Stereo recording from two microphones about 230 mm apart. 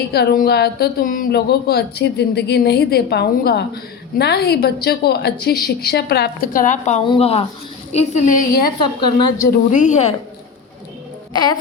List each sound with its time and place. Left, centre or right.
0.1 s a woman's voice: left
11.3 s speech: centre